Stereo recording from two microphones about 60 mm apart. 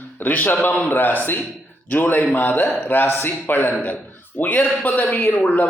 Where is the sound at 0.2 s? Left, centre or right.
Left.